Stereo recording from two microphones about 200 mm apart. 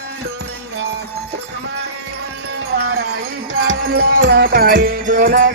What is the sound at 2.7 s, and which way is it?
Wind chime, 50° right (ahead or behind).